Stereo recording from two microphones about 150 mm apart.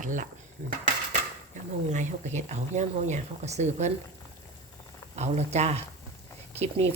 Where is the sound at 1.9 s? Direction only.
55° right (ahead or behind).